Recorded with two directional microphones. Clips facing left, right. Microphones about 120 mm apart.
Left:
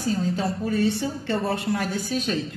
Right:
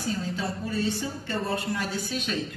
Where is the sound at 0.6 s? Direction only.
60° left (ahead or behind); by 2.4 s 45° left (ahead or behind).